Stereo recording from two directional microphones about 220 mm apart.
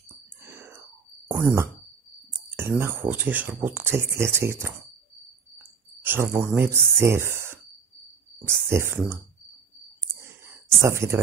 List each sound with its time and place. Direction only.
0.5 s a sound: 10° right (ahead or behind)
1.3 s speech: 10° right (ahead or behind)
6.0 s speech: 10° right (ahead or behind)
10.7 s speech: 15° right (ahead or behind)